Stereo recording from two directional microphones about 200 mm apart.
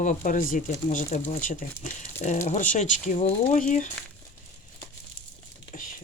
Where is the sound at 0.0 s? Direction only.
40° left (ahead or behind).